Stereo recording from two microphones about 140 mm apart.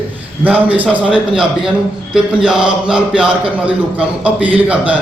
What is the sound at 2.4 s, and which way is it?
Mantra, 5° right (ahead or behind).